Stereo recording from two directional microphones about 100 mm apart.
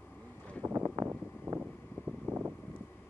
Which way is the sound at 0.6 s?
25° right (ahead or behind).